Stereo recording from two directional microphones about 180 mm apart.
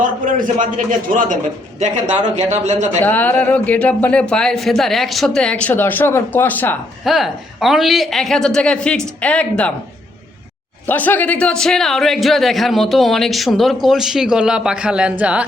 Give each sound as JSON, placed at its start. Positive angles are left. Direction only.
{"t": 0.3, "sound": "a man's voice", "side_deg": -45}
{"t": 3.0, "sound": "speech", "side_deg": 10}
{"t": 7.0, "sound": "a man's voice", "side_deg": 0}
{"t": 10.8, "sound": "a man's voice", "side_deg": 10}